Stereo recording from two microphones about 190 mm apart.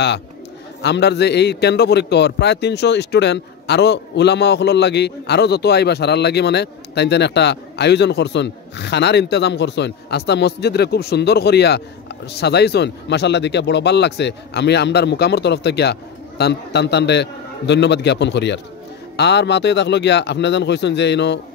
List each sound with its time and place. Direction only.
0.8 s a man's voice: 60° left (ahead or behind)